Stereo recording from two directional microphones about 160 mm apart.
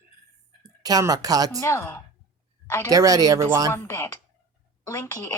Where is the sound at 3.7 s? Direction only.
15° left (ahead or behind).